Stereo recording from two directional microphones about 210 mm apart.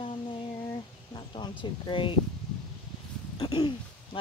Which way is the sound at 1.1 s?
25° left (ahead or behind).